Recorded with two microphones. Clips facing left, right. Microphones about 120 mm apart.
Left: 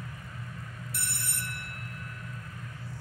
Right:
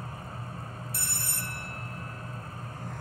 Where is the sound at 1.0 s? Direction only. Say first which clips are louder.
Right 1 dB; 30° right (ahead or behind).